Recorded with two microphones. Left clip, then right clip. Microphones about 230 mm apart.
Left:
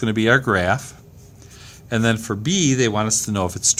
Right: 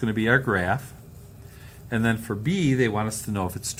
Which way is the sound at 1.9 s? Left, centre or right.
Left.